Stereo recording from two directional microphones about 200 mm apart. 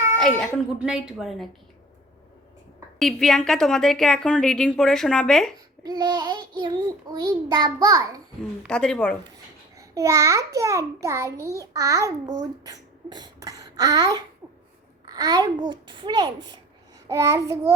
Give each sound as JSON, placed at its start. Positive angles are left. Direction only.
{"t": 0.2, "sound": "a woman's voice", "side_deg": 0}
{"t": 3.0, "sound": "a woman's voice", "side_deg": 0}
{"t": 5.8, "sound": "a child's voice", "side_deg": -20}
{"t": 8.6, "sound": "a woman's voice", "side_deg": 5}
{"t": 9.7, "sound": "a child's voice", "side_deg": -15}